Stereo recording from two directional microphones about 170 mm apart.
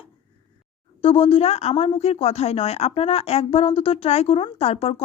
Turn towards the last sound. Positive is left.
turn(degrees=35)  # may be behind; listen again after turning